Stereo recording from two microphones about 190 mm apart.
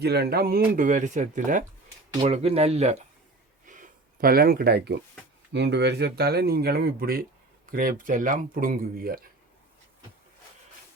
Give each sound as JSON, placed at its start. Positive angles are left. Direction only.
{"t": 0.0, "sound": "speech", "side_deg": -60}
{"t": 3.7, "sound": "a sound", "side_deg": -45}
{"t": 5.5, "sound": "speech", "side_deg": -65}